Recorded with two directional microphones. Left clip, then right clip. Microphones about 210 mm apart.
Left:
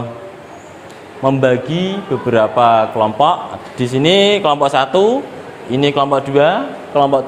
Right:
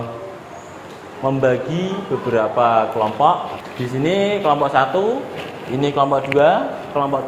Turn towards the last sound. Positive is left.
turn(degrees=55)  # may be behind; listen again after turning